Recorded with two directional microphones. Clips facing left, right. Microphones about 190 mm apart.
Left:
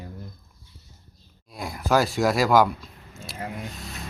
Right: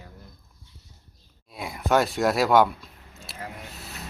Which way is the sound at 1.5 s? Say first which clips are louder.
Even; centre (ahead or behind).